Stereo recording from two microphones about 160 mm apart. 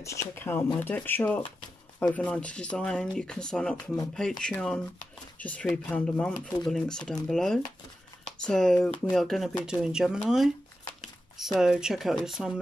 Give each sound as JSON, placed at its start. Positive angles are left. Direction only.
{"t": 0.0, "sound": "speech", "side_deg": 15}